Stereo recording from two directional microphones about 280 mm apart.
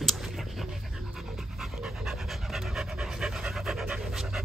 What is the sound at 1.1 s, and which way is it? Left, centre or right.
Pant, centre.